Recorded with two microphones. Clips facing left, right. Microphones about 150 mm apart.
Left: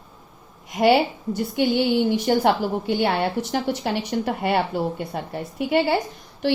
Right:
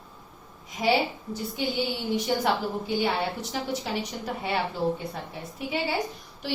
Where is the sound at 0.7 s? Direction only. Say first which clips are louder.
Left 8 dB; 70° left (ahead or behind).